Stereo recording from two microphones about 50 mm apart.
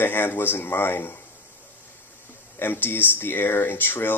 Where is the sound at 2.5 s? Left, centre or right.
Left.